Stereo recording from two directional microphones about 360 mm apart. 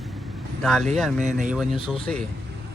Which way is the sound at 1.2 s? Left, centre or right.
Right.